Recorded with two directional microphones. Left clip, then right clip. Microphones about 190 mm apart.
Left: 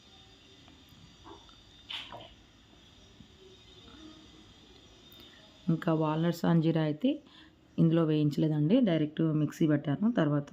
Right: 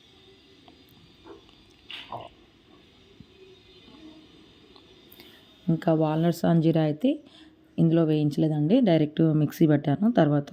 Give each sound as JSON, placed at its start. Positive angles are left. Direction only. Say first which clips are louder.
{"t": 5.6, "sound": "speech", "louder": "right 6 dB", "side_deg": -20}